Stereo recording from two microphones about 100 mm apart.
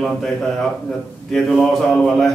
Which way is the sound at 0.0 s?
5° left (ahead or behind).